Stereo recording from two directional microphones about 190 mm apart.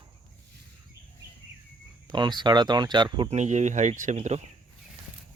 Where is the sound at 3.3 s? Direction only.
40° right (ahead or behind).